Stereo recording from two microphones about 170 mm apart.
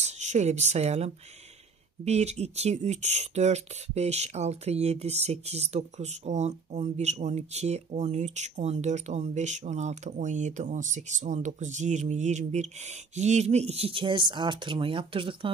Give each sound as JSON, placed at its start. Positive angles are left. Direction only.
{"t": 0.0, "sound": "speech", "side_deg": -40}